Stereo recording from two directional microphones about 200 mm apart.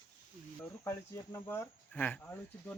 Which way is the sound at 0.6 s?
15° left (ahead or behind).